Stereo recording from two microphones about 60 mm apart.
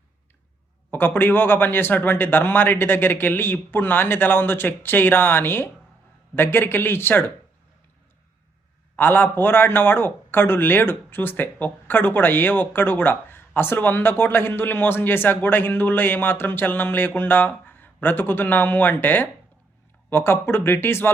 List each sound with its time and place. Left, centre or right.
0.9 s speech: left
9.0 s speech: left